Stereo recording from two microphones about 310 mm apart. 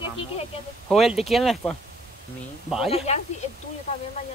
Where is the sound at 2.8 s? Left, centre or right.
Centre.